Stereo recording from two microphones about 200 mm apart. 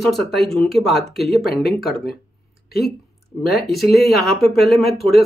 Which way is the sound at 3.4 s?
50° left (ahead or behind).